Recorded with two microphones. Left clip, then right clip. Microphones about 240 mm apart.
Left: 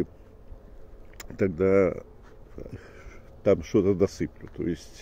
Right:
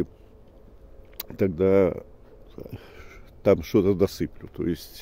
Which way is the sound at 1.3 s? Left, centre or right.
Right.